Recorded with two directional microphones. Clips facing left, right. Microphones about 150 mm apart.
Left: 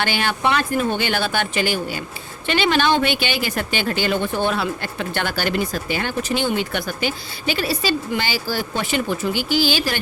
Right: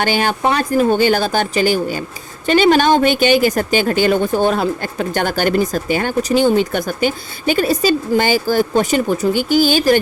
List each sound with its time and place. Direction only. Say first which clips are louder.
0.0 s speech: right 5 dB; 45° right (ahead or behind)